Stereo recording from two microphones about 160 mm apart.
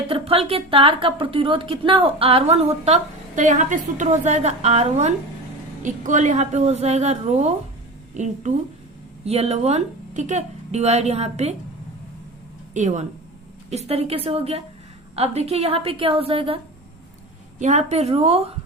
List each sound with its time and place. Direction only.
0.1 s a woman's voice: 35° right (ahead or behind)
12.7 s a woman's voice: 50° right (ahead or behind)
17.6 s speech: 45° right (ahead or behind)